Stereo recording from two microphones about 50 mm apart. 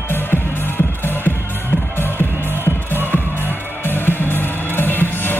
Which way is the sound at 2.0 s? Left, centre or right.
Left.